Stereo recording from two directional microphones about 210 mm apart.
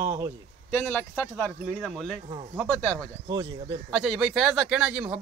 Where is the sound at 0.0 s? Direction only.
15° right (ahead or behind).